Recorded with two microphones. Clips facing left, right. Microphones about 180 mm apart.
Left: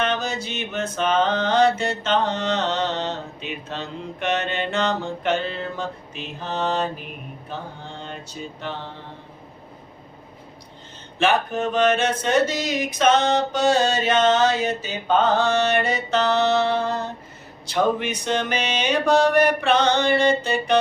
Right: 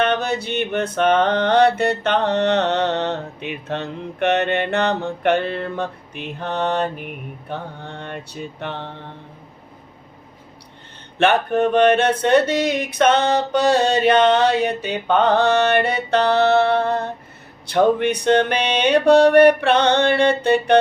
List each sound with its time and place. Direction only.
0.0 s mantra: 60° right (ahead or behind)
11.2 s mantra: 60° right (ahead or behind)